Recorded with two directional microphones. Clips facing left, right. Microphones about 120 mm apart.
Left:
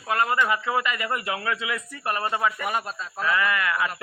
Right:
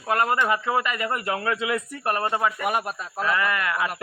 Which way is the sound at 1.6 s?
50° right (ahead or behind).